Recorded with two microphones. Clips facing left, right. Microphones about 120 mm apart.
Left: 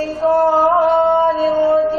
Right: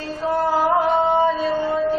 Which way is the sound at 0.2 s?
40° left (ahead or behind).